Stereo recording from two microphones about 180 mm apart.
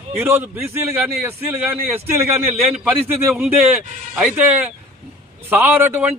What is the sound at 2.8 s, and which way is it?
Speech, 5° right (ahead or behind).